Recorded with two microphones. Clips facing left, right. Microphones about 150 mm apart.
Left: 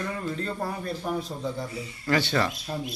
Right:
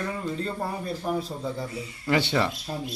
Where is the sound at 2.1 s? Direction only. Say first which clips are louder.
Right 1 dB; 20° right (ahead or behind).